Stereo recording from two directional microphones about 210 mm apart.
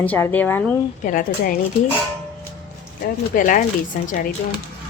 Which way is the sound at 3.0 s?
40° left (ahead or behind).